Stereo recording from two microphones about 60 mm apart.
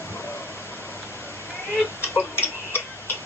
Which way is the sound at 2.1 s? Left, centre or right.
Left.